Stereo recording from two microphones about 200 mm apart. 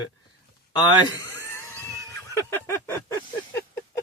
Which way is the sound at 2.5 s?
10° left (ahead or behind).